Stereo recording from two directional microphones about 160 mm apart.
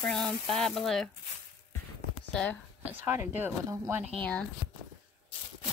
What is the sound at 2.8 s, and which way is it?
A woman's voice, 10° right (ahead or behind).